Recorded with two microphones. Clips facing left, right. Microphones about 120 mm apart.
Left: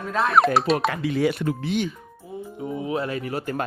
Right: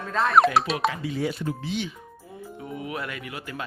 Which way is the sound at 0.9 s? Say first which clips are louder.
Left 5 dB; 70° left (ahead or behind).